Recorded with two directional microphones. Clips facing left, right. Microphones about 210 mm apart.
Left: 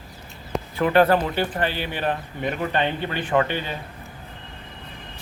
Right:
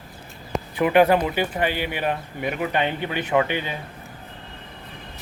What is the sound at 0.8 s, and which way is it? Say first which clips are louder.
Speech: right 1 dB; 15° right (ahead or behind).